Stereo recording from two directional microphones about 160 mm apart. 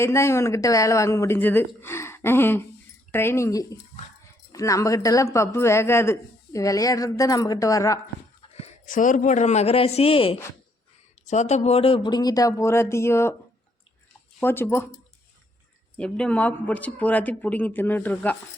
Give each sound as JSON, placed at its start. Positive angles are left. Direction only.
{"t": 0.0, "sound": "speech", "side_deg": 15}
{"t": 8.9, "sound": "a man's voice", "side_deg": 55}
{"t": 14.4, "sound": "speech", "side_deg": 15}
{"t": 16.0, "sound": "speech", "side_deg": 5}